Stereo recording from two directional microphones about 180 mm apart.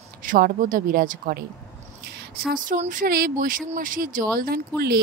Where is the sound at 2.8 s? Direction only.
50° right (ahead or behind).